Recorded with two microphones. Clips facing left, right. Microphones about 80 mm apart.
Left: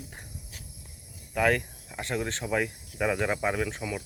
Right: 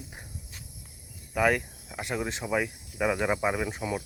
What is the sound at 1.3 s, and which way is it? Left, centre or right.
Speech, centre.